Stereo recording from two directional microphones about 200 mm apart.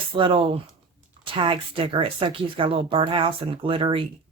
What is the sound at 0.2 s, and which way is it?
Speech, 25° right (ahead or behind).